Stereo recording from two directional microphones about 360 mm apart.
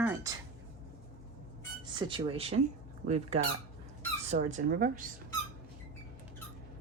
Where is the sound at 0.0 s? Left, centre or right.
Centre.